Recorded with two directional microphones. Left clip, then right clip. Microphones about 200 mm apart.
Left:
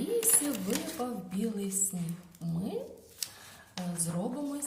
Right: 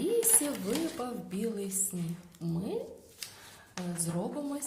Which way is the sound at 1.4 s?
30° right (ahead or behind).